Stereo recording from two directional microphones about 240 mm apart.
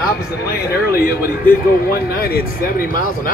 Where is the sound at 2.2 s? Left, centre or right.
Left.